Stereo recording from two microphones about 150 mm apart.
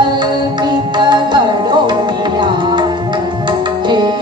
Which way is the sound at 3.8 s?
30° right (ahead or behind).